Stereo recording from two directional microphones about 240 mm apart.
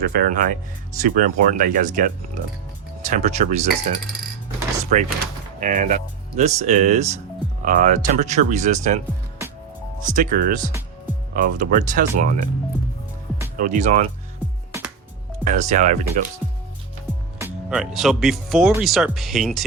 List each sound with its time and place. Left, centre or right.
0.0 s speech: right
2.4 s speech: right
3.0 s speech: right
4.8 s a sound: right
5.5 s speech: right
10.1 s speech: right
13.6 s speech: right
15.4 s speech: right
17.3 s speech: centre